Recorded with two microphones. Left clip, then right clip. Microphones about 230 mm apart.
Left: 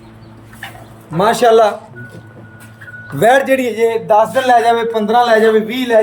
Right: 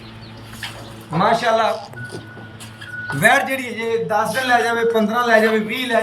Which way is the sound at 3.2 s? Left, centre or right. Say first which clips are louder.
Left 5 dB; left.